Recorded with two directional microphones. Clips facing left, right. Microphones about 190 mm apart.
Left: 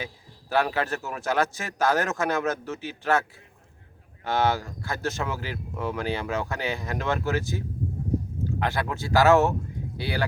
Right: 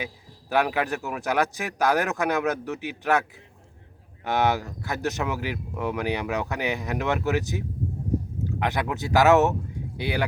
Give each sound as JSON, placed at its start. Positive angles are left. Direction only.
{"t": 0.5, "sound": "speech", "side_deg": -15}
{"t": 8.6, "sound": "speech", "side_deg": -20}